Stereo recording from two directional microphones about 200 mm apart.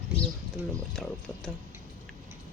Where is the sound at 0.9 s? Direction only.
5° left (ahead or behind).